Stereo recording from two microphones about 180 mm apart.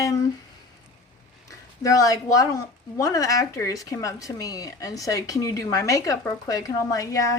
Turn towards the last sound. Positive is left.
turn(degrees=20)  # may be behind; listen again after turning